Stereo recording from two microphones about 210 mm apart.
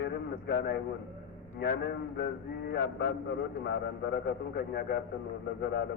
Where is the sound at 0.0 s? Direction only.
50° left (ahead or behind).